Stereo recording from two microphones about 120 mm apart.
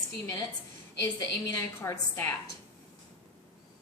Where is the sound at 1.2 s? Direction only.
25° left (ahead or behind).